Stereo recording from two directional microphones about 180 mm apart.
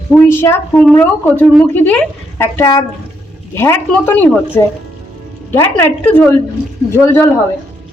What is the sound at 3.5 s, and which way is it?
A woman's voice, 15° left (ahead or behind).